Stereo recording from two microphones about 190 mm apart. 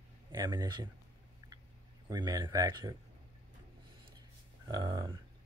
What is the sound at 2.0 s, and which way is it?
Speech, 20° right (ahead or behind).